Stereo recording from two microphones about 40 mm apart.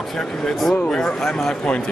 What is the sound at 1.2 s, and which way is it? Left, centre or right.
Speech, centre.